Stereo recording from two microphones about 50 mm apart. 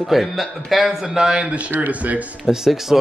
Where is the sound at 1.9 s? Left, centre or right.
Right.